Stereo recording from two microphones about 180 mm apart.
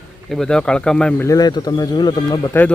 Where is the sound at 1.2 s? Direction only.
20° left (ahead or behind).